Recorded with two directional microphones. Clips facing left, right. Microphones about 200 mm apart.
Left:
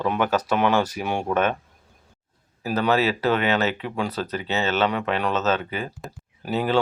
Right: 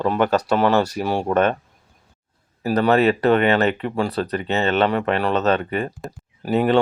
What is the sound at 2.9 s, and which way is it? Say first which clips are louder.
Speech: right 5 dB; centre (ahead or behind).